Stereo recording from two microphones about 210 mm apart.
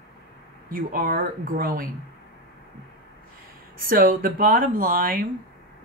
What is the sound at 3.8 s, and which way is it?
Speech, 45° right (ahead or behind).